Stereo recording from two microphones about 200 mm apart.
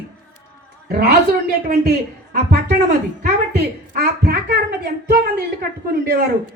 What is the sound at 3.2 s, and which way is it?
A woman's voice, 50° right (ahead or behind).